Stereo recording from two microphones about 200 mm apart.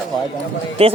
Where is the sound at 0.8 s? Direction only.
30° right (ahead or behind).